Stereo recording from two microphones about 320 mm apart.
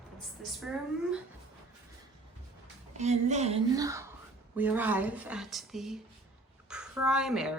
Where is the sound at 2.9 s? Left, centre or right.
Right.